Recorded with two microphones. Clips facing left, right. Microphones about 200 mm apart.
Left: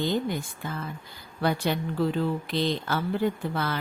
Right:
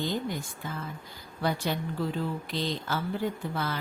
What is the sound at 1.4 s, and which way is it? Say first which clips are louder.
A woman's voice: left 3 dB; 70° left (ahead or behind).